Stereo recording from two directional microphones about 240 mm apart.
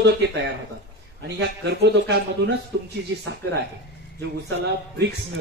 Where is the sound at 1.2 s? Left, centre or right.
Right.